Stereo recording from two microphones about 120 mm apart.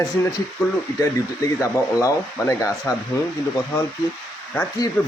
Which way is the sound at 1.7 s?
25° left (ahead or behind).